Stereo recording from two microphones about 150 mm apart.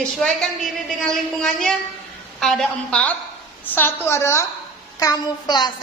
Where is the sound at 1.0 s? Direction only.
5° left (ahead or behind).